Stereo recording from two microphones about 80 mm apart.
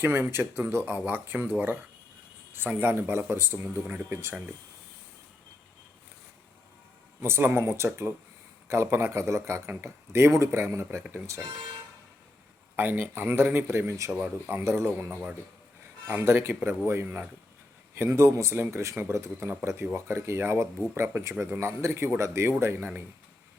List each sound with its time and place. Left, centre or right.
0.0 s a man's voice: right
7.2 s a man's voice: right
12.7 s speech: right
14.2 s a man's voice: right